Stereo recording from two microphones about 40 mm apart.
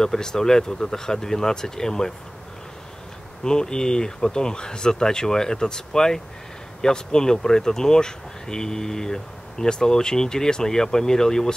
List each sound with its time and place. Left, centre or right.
0.0 s speech: centre
3.4 s speech: centre